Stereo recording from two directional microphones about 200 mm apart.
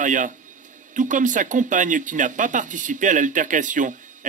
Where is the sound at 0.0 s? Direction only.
40° right (ahead or behind).